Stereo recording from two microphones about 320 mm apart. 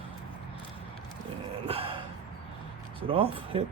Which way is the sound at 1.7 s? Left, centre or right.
Centre.